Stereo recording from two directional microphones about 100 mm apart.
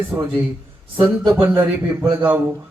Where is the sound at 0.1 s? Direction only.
15° right (ahead or behind).